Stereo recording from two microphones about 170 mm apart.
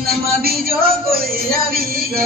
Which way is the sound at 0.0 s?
65° right (ahead or behind).